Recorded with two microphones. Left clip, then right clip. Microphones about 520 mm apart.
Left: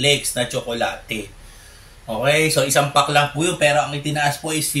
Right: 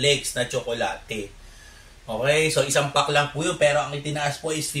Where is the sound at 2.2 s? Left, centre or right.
Right.